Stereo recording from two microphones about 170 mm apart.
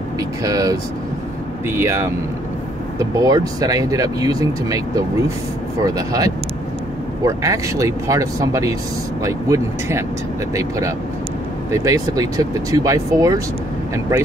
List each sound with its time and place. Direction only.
0.4 s speech: 20° right (ahead or behind)